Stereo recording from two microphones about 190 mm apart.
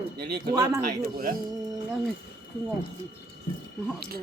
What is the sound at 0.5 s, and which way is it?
Speech, 20° right (ahead or behind).